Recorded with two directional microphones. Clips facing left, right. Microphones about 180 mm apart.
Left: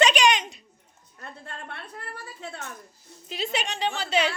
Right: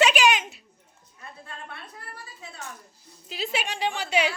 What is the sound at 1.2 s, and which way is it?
Music, 60° left (ahead or behind).